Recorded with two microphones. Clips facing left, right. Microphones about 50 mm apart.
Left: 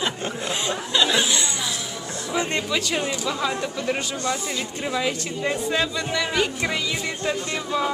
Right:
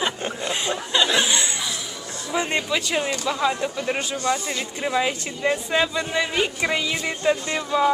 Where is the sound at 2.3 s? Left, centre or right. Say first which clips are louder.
Right 1 dB; centre.